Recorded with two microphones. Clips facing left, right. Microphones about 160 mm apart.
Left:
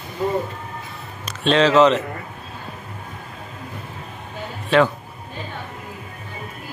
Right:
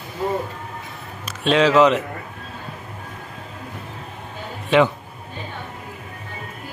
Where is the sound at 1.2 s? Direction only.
10° right (ahead or behind).